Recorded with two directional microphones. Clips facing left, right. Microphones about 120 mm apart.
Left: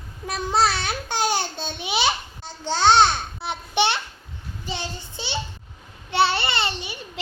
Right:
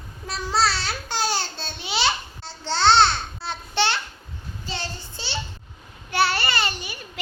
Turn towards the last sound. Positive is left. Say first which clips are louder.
# even
turn(degrees=25)  # may be behind; listen again after turning